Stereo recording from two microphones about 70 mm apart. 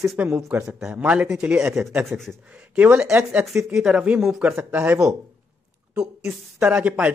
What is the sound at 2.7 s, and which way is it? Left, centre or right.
Speech, right.